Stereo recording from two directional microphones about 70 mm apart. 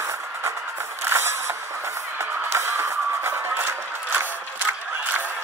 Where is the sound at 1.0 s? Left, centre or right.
Right.